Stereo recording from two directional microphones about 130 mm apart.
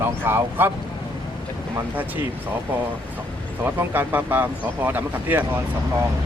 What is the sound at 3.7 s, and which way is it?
Speech, 15° right (ahead or behind).